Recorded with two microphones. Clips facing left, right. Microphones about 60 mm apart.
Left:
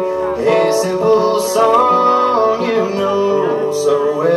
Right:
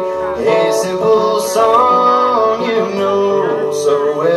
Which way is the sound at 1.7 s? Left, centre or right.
Right.